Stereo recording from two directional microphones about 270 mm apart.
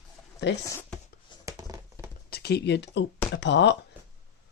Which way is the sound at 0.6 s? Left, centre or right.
Centre.